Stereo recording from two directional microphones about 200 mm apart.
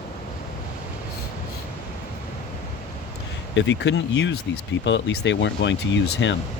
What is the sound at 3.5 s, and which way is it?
Speech, 60° left (ahead or behind).